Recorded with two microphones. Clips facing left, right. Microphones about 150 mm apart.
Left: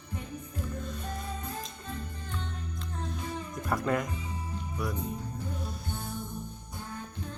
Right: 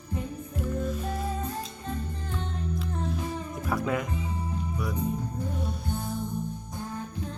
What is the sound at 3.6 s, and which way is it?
Music, centre (ahead or behind).